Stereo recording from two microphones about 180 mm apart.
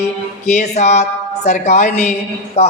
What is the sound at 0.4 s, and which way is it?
A man's voice, 40° left (ahead or behind).